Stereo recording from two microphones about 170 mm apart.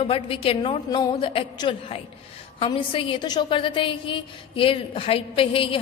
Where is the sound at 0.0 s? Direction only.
35° left (ahead or behind).